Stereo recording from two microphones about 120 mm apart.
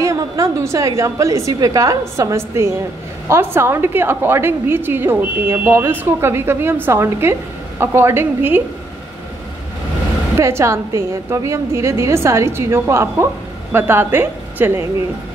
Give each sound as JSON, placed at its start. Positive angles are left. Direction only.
{"t": 0.0, "sound": "a woman's voice", "side_deg": -25}
{"t": 10.3, "sound": "a woman's voice", "side_deg": -25}